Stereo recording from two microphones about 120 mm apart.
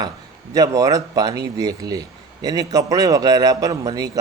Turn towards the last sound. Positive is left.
turn(degrees=-30)  # may be behind; listen again after turning